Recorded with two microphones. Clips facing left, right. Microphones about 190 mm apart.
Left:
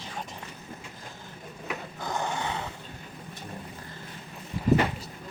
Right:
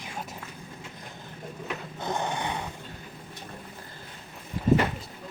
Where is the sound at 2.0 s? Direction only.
20° right (ahead or behind).